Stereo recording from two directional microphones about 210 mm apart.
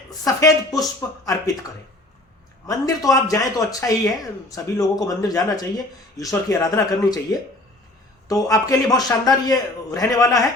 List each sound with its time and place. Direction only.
0.1 s speech: 15° left (ahead or behind)
2.6 s speech: 15° left (ahead or behind)